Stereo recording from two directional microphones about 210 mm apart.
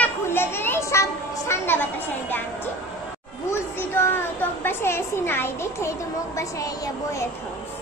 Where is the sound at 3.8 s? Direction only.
10° left (ahead or behind).